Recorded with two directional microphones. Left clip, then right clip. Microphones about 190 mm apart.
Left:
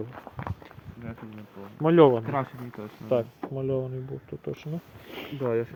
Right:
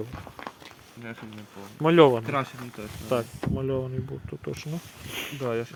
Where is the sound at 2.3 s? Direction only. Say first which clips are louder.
Right 1 dB; 15° left (ahead or behind).